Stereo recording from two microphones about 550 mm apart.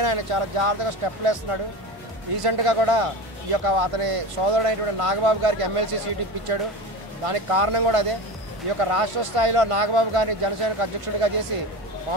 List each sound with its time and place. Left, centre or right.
0.0 s speech: right
7.2 s speech: right